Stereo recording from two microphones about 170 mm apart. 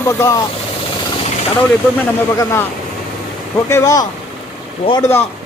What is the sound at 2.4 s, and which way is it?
Speech, 15° left (ahead or behind).